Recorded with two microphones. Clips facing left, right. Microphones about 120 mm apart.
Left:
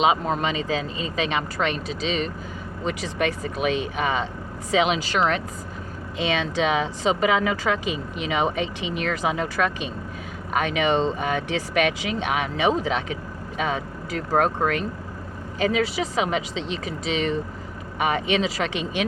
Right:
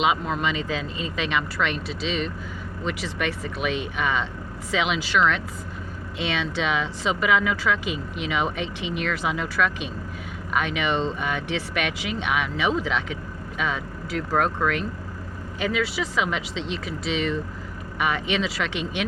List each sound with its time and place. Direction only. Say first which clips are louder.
0.0 s speech: left 2 dB; 40° left (ahead or behind)